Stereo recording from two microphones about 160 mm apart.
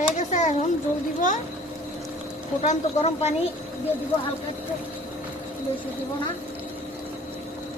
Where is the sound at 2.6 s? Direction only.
45° left (ahead or behind).